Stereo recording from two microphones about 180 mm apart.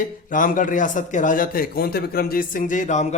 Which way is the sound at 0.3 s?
50° left (ahead or behind).